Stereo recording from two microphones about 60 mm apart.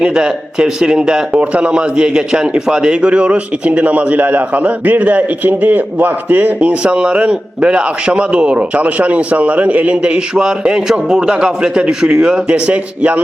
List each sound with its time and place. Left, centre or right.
0.0 s speech: centre